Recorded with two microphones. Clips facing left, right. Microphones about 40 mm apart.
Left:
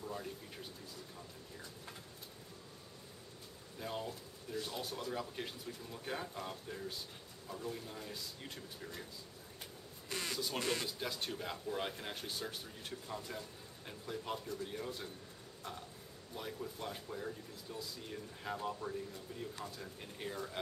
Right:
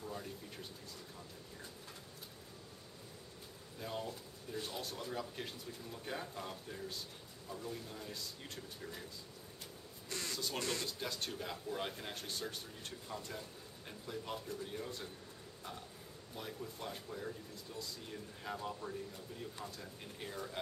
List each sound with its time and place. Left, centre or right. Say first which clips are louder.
0.0 s speech: left 1 dB; centre
3.8 s speech: left 1 dB; centre
10.0 s speech: left 2 dB; left
10.3 s speech: left 1 dB; centre
10.6 s speech: left 3 dB; centre
10.9 s speech: left 1 dB; centre
16.3 s speech: left 2 dB; centre